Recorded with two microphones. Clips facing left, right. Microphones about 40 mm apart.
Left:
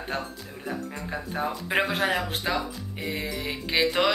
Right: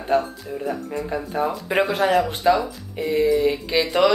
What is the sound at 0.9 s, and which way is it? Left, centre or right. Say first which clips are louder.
Speech: right 7 dB; centre.